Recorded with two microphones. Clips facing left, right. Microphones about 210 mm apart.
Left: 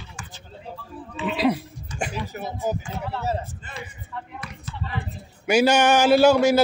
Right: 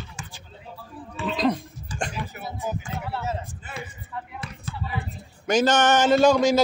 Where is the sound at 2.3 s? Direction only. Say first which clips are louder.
Left 4 dB; 40° left (ahead or behind).